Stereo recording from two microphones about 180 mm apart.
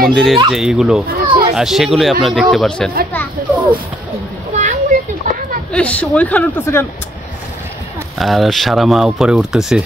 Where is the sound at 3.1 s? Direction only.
10° left (ahead or behind).